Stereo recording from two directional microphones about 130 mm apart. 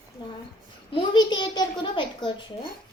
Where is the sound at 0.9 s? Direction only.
40° left (ahead or behind).